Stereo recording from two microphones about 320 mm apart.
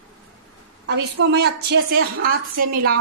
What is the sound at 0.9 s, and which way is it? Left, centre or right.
A woman's voice, right.